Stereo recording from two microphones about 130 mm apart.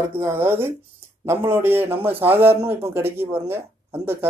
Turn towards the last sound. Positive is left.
turn(degrees=-15)  # may be behind; listen again after turning